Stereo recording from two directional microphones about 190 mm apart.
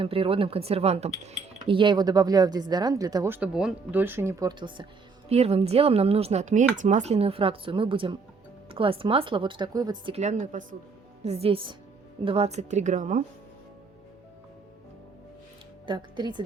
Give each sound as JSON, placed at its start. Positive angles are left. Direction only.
{"t": 0.0, "sound": "speech", "side_deg": -30}
{"t": 5.3, "sound": "speech", "side_deg": -35}
{"t": 10.2, "sound": "speech", "side_deg": -40}
{"t": 15.9, "sound": "speech", "side_deg": -25}